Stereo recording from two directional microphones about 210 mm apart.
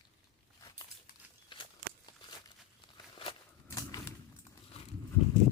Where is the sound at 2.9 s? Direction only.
25° left (ahead or behind).